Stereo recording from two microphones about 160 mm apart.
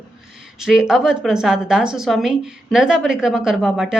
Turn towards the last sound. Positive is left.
turn(degrees=0)  # may be behind; listen again after turning